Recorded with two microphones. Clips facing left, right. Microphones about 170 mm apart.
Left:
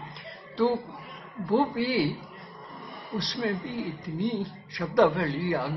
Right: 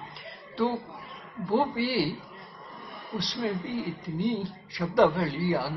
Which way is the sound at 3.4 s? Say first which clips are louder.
Even; centre (ahead or behind).